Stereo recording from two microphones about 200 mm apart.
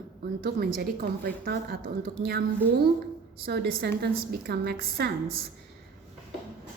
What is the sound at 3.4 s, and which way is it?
A woman's voice, 55° right (ahead or behind).